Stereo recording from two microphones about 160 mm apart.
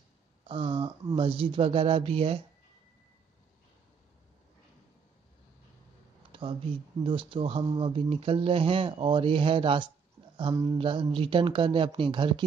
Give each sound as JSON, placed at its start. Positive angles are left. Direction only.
{"t": 0.5, "sound": "speech", "side_deg": -30}
{"t": 6.3, "sound": "a sound", "side_deg": -35}
{"t": 7.0, "sound": "speech", "side_deg": -35}